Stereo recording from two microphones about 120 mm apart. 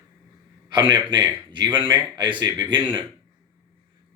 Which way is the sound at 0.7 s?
40° right (ahead or behind).